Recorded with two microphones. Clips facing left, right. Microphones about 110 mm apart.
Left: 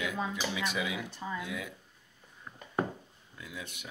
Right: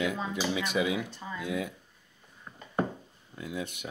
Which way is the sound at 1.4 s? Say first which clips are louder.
Right 6 dB; 35° right (ahead or behind).